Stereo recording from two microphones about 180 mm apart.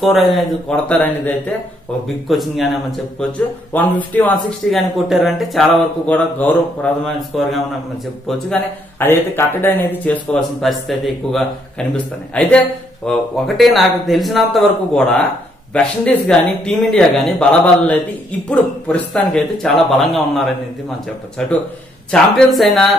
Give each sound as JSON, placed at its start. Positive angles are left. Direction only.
{"t": 0.0, "sound": "speech", "side_deg": 0}
{"t": 9.0, "sound": "speech", "side_deg": 10}